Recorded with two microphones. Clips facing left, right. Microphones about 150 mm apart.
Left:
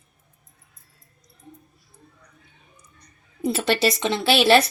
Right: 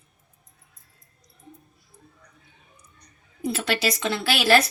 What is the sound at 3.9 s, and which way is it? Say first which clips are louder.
Speech: left 5 dB; 25° left (ahead or behind).